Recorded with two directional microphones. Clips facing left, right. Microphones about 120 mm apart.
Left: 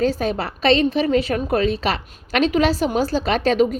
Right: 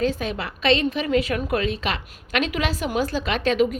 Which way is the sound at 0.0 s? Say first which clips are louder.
Left 4 dB; 35° left (ahead or behind).